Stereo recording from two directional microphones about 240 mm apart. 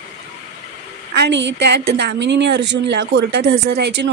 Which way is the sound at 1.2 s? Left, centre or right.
Right.